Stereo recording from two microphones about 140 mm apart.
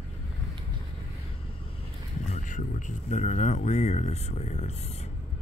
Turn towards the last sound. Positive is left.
turn(degrees=55)  # may be behind; listen again after turning